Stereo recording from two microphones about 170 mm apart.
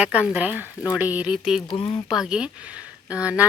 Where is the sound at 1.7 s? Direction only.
30° left (ahead or behind).